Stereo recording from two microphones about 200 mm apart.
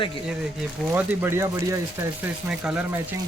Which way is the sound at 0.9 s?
10° right (ahead or behind).